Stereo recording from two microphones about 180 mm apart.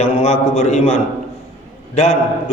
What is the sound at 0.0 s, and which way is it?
Speech, 35° left (ahead or behind).